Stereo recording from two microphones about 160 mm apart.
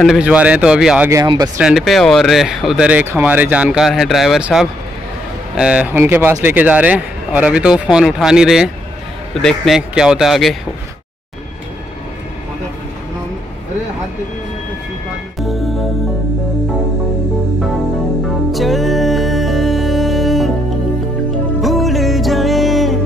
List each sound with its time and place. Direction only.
0.0 s speech: 5° right (ahead or behind)
1.1 s speech: 25° right (ahead or behind)
1.6 s speech: 5° right (ahead or behind)
15.3 s music: centre (ahead or behind)
18.5 s music: centre (ahead or behind)
21.5 s music: centre (ahead or behind)